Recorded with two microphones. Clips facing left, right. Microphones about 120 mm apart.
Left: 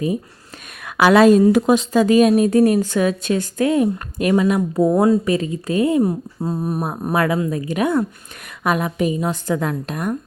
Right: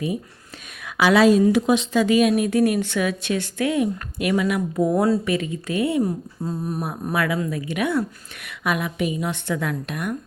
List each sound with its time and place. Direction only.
0.8 s speech: 55° left (ahead or behind); by 5.2 s 20° left (ahead or behind)
5.2 s speech: 30° left (ahead or behind)
6.4 s humming: 60° left (ahead or behind)
7.0 s speech: 35° left (ahead or behind)